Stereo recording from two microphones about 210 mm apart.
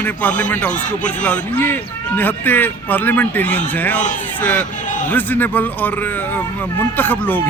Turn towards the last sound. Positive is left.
turn(degrees=10)  # may be behind; listen again after turning